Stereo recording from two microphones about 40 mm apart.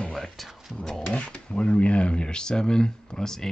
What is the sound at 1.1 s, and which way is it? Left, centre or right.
Speech, left.